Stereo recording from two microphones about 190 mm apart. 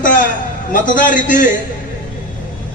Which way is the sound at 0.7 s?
45° left (ahead or behind).